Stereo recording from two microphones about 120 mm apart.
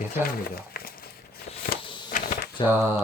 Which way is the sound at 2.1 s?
90° left.